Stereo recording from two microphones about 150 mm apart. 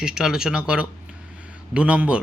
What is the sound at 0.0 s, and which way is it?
Speech, 5° right (ahead or behind).